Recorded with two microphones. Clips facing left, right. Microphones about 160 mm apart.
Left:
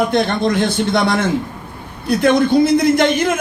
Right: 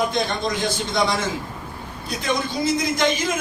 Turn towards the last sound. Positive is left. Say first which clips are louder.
# left 8 dB
turn(degrees=60)  # may be behind; listen again after turning